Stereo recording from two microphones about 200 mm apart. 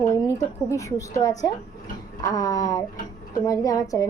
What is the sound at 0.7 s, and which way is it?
A woman's voice, 15° left (ahead or behind).